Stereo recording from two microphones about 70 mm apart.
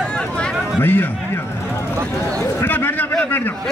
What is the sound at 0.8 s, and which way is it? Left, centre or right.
Speech, left.